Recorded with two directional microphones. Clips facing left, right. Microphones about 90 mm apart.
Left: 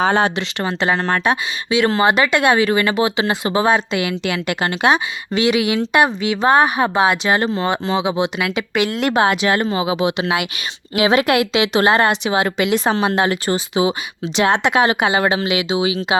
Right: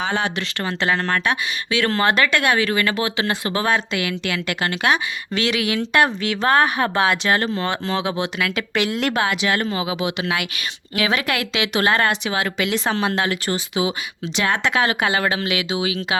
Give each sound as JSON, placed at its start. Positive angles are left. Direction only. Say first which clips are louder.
{"t": 0.0, "sound": "speech", "louder": "left 7 dB", "side_deg": 40}
{"t": 0.3, "sound": "speech", "louder": "left 3 dB", "side_deg": 25}
{"t": 1.8, "sound": "speech", "louder": "left 3 dB", "side_deg": 15}
{"t": 9.1, "sound": "speech", "louder": "left 8 dB", "side_deg": 35}